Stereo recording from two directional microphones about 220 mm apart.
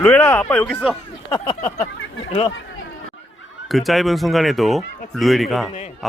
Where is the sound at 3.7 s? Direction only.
Centre (ahead or behind).